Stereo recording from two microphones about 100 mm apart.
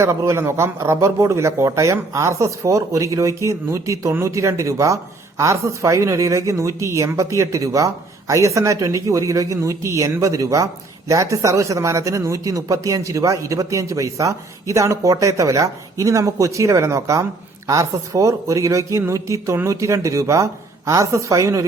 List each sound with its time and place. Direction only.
0.0 s speech: 30° right (ahead or behind)